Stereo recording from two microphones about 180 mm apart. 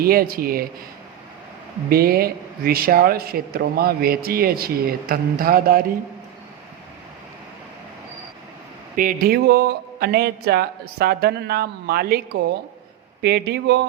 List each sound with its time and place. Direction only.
0.0 s speech: 55° right (ahead or behind)
1.9 s speech: 55° right (ahead or behind)
9.0 s speech: 50° right (ahead or behind); by 13.8 s 70° right (ahead or behind)